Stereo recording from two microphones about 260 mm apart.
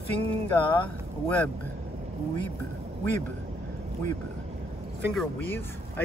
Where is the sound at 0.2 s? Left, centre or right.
Right.